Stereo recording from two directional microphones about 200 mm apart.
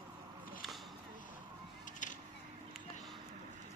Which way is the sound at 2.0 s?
40° left (ahead or behind).